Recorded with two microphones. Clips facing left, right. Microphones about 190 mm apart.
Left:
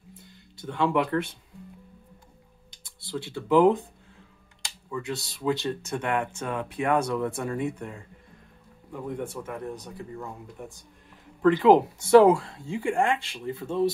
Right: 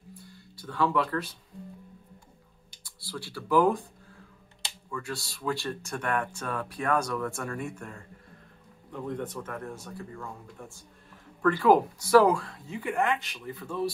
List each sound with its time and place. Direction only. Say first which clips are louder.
0.1 s music: right 2 dB; 20° left (ahead or behind)
2.7 s speech: left 6 dB; 25° left (ahead or behind)
4.9 s speech: left 4 dB; 20° left (ahead or behind)